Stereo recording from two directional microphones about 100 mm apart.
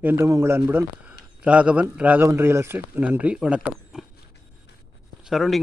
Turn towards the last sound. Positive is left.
turn(degrees=0)  # may be behind; listen again after turning